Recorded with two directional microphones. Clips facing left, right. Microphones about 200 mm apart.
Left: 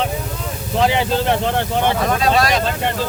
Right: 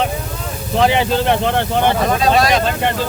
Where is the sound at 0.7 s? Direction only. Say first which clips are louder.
Right 2 dB; 65° right (ahead or behind).